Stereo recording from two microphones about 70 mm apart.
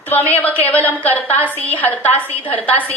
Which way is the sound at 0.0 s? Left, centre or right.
Left.